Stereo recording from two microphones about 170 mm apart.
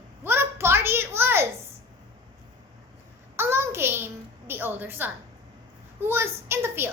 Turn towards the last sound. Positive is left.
turn(degrees=-15)  # may be behind; listen again after turning